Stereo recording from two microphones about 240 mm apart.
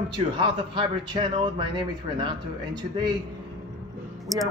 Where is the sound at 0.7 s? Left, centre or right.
Centre.